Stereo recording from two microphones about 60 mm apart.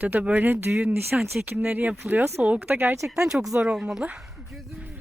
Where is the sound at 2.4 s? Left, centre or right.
Right.